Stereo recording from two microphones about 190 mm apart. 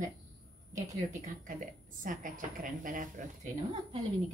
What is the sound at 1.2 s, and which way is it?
A woman's voice, 45° right (ahead or behind).